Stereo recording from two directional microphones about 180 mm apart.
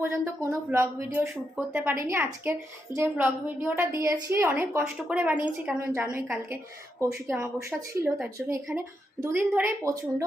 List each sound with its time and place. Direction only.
0.0 s a woman's voice: 15° right (ahead or behind)